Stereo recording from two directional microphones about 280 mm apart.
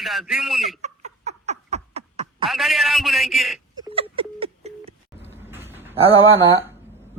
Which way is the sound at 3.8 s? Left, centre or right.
Centre.